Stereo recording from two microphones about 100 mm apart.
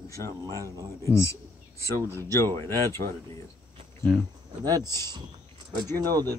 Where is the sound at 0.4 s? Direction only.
35° right (ahead or behind).